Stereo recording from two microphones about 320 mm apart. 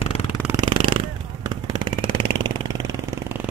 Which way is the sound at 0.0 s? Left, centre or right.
Centre.